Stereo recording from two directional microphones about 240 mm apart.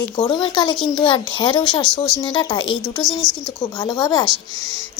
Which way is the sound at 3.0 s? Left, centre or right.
Centre.